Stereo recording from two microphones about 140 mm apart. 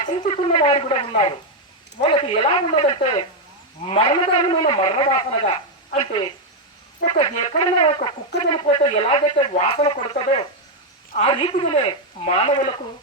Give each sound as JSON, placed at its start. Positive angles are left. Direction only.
{"t": 0.3, "sound": "a man's voice", "side_deg": 45}